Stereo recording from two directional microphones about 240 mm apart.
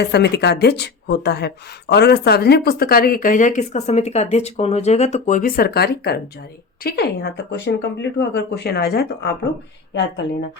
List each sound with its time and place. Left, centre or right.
0.0 s speech: left